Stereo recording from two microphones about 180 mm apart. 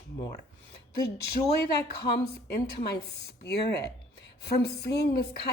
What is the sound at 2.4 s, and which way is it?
A woman's voice, 65° left (ahead or behind).